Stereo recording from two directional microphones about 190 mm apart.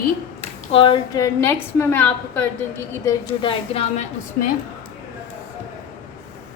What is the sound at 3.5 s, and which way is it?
Speech, 30° left (ahead or behind).